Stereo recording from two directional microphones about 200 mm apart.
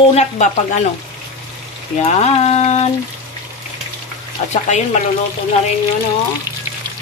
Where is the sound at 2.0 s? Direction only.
30° left (ahead or behind).